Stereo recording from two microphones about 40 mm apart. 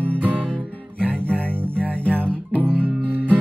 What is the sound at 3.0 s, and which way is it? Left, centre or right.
Music, right.